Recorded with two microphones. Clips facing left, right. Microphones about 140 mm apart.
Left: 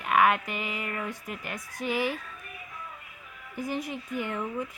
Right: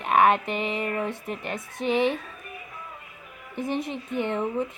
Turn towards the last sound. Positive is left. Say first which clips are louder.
# right 6 dB
turn(degrees=-25)  # may be behind; listen again after turning